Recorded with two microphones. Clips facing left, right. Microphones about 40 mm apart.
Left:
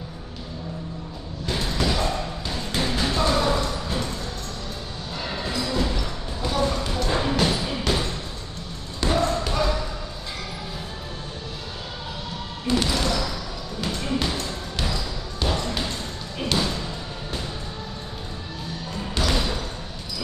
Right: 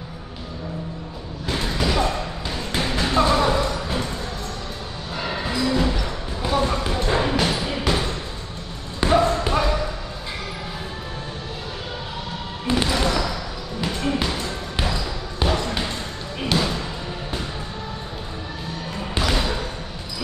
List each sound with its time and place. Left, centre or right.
1.4 s basketball bounce: centre
5.1 s basketball bounce: right
9.0 s basketball bounce: right
12.6 s music: right
13.7 s basketball bounce: centre
19.1 s basketball bounce: right